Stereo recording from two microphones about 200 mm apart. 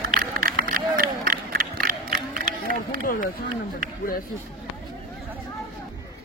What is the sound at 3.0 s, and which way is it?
Speech, 45° left (ahead or behind).